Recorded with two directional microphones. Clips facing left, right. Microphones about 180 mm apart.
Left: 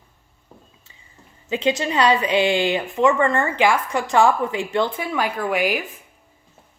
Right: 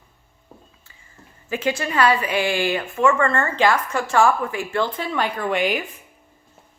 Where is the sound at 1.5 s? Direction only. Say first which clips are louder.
Left 3 dB; 20° left (ahead or behind); by 5.9 s centre (ahead or behind).